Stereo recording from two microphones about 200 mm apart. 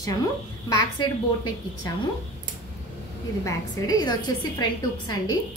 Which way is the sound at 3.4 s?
20° left (ahead or behind).